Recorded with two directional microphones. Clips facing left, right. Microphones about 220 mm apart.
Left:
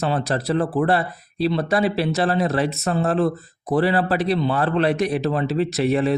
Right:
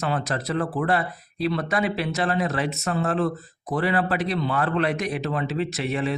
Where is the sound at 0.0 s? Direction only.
30° left (ahead or behind).